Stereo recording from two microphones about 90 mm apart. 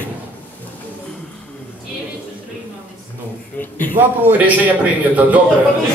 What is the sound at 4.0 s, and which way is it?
A man's voice, 20° right (ahead or behind).